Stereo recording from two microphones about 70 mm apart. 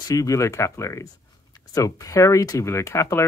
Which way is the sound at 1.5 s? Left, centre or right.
Left.